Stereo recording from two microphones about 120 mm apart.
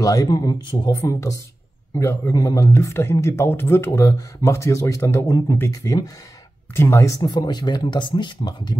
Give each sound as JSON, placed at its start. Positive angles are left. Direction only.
{"t": 0.0, "sound": "speech", "side_deg": 30}